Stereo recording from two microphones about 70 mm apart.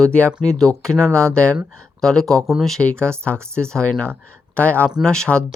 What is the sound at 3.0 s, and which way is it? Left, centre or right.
Speech, centre.